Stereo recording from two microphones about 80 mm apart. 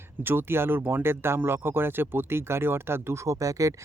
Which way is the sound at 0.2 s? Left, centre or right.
Right.